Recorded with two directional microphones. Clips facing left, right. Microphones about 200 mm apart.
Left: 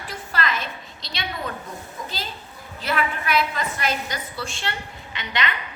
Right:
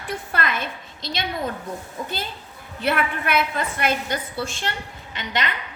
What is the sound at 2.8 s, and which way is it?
A woman's voice, 55° right (ahead or behind).